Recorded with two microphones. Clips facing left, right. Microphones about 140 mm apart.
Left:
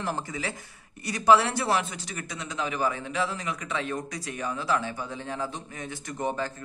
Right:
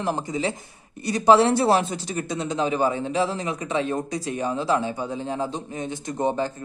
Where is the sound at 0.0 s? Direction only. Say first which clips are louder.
Right 6 dB; 20° right (ahead or behind).